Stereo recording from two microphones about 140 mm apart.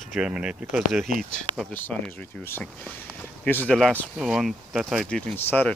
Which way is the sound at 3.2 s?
10° left (ahead or behind).